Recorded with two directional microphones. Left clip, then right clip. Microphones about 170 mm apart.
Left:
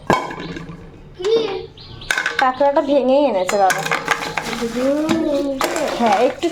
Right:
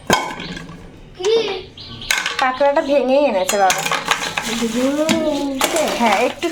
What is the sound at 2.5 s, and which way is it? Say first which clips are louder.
Speech: right 1 dB; 20° left (ahead or behind).